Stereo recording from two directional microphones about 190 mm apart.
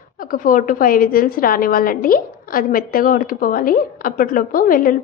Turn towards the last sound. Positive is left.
turn(degrees=50)  # may be behind; listen again after turning